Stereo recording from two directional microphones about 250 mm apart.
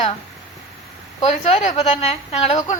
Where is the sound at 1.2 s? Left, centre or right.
Left.